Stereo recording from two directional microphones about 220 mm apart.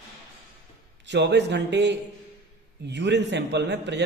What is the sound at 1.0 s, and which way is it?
A man's voice, 55° right (ahead or behind).